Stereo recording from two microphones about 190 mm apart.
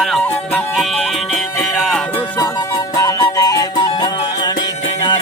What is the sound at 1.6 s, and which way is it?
Music, centre (ahead or behind).